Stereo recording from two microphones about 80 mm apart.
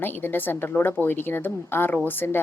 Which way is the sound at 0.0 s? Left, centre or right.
Left.